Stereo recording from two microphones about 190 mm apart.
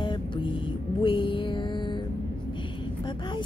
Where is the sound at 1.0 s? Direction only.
25° left (ahead or behind).